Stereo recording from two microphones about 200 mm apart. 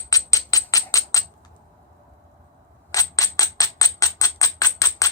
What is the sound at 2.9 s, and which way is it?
Music, 20° left (ahead or behind).